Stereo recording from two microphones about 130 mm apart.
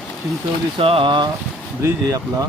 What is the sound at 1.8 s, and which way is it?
Speech, 25° right (ahead or behind).